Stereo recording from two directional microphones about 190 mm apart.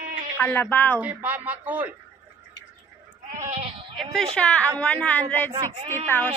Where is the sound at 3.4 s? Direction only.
30° right (ahead or behind).